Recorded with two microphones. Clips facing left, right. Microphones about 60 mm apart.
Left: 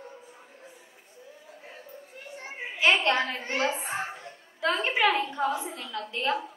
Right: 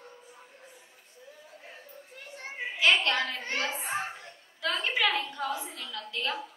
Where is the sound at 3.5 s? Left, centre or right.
Left.